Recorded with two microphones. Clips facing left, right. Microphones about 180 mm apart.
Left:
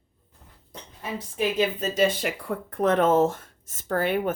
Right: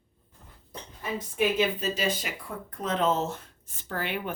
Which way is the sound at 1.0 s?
35° left (ahead or behind).